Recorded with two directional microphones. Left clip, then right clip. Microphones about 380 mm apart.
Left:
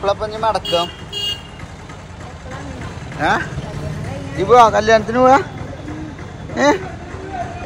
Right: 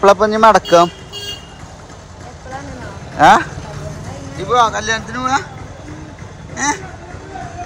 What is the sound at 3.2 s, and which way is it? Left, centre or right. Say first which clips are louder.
A man's voice: right 9 dB; centre.